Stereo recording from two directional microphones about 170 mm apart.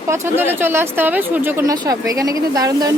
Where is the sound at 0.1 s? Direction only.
15° right (ahead or behind).